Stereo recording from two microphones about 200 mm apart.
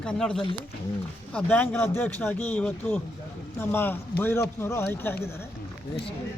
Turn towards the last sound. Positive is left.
turn(degrees=10)  # may be behind; listen again after turning